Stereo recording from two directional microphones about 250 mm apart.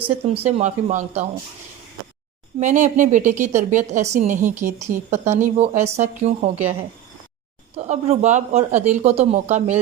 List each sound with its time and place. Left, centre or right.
0.3 s a woman's voice: right
2.6 s a woman's voice: right
7.8 s a woman's voice: right